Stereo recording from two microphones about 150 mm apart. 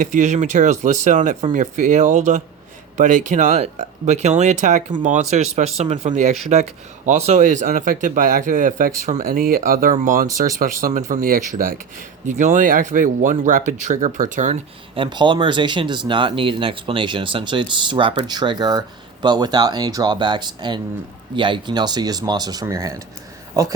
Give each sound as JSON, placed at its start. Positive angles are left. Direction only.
{"t": 0.0, "sound": "speech", "side_deg": -55}
{"t": 9.2, "sound": "speech", "side_deg": -80}
{"t": 9.9, "sound": "speech", "side_deg": -60}
{"t": 10.6, "sound": "speech", "side_deg": -75}
{"t": 12.3, "sound": "speech", "side_deg": -55}
{"t": 14.9, "sound": "speech", "side_deg": -35}